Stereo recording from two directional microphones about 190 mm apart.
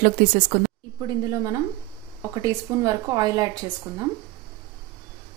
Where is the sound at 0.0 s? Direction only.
45° right (ahead or behind).